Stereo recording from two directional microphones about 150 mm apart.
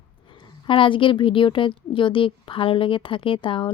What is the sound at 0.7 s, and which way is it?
A woman's voice, 35° left (ahead or behind).